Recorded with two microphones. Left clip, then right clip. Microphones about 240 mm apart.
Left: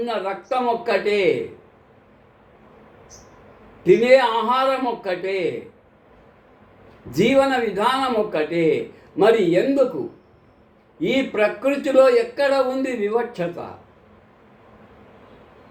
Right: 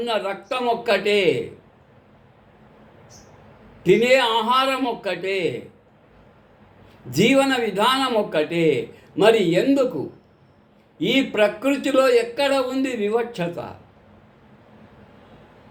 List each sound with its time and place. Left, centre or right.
0.0 s speech: centre
3.8 s speech: centre
7.1 s speech: centre
11.0 s speech: right